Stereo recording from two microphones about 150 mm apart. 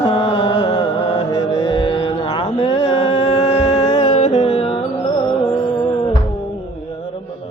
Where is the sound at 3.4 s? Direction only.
50° left (ahead or behind).